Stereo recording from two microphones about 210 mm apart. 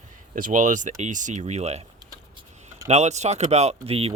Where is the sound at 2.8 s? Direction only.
30° right (ahead or behind).